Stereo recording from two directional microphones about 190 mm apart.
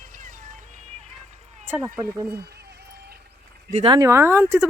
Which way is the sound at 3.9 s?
15° right (ahead or behind).